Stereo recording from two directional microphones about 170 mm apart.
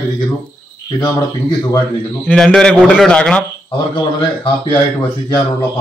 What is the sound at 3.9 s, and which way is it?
Speech, 25° left (ahead or behind).